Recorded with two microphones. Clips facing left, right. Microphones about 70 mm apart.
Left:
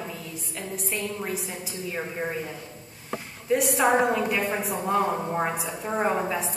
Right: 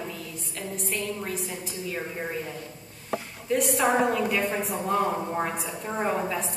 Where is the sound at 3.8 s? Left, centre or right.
Centre.